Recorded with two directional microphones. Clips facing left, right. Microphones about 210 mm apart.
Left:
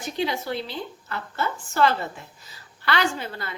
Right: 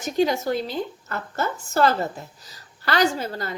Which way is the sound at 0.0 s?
45° right (ahead or behind).